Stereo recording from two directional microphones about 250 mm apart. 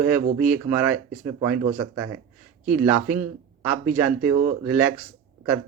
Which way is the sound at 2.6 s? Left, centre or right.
Centre.